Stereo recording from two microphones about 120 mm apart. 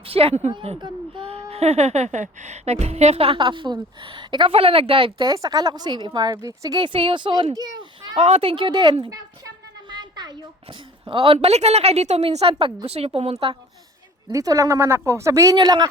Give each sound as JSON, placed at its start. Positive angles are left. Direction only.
{"t": 0.1, "sound": "speech", "side_deg": -55}
{"t": 0.8, "sound": "speech", "side_deg": -40}
{"t": 6.8, "sound": "a child's voice", "side_deg": -45}
{"t": 8.2, "sound": "speech", "side_deg": -55}
{"t": 9.9, "sound": "a sound", "side_deg": -35}
{"t": 11.0, "sound": "a woman's voice", "side_deg": -45}
{"t": 14.3, "sound": "speech", "side_deg": -30}
{"t": 15.5, "sound": "speech", "side_deg": -35}